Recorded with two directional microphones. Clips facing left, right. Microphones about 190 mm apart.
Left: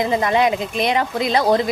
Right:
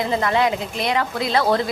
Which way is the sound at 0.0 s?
20° left (ahead or behind).